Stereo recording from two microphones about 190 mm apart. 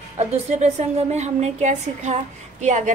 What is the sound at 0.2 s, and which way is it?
A woman's voice, 35° right (ahead or behind).